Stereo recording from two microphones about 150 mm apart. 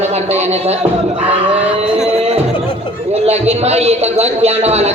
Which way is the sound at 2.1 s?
45° right (ahead or behind).